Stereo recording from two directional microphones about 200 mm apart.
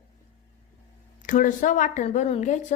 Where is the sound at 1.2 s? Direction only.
40° left (ahead or behind).